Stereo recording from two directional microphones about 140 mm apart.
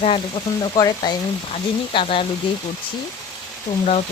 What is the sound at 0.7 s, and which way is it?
Speech, 30° left (ahead or behind).